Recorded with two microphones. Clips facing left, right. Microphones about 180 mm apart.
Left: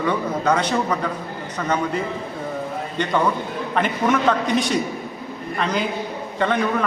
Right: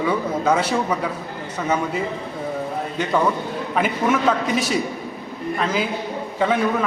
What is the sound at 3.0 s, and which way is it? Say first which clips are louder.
A man's voice: even; 5° right (ahead or behind).